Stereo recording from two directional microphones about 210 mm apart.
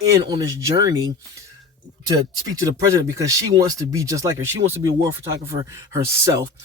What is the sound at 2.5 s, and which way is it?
Speech, 15° right (ahead or behind).